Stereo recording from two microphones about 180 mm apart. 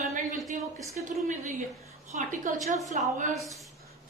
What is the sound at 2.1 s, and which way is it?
A woman's voice, 45° right (ahead or behind).